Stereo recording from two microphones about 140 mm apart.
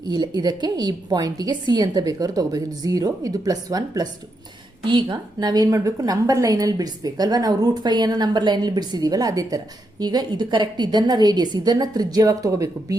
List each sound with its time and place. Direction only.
0.0 s a woman's voice: 30° right (ahead or behind)